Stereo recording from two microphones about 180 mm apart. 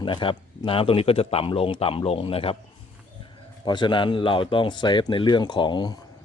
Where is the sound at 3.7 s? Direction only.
25° left (ahead or behind).